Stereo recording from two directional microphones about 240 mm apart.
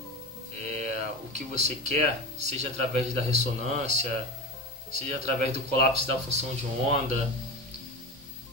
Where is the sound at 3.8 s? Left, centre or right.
Right.